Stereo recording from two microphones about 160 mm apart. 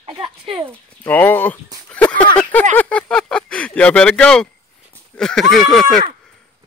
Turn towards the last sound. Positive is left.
turn(degrees=0)  # may be behind; listen again after turning